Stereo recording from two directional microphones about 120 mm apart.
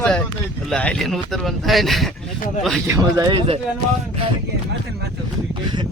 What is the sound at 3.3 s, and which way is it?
Speech, 50° right (ahead or behind).